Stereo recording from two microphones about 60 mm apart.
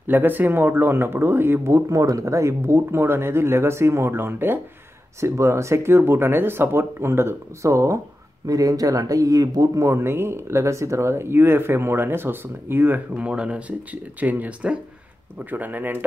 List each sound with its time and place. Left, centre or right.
0.0 s speech: right
1.9 s speech: right
5.2 s speech: right
8.5 s speech: right
9.8 s speech: right
13.1 s speech: centre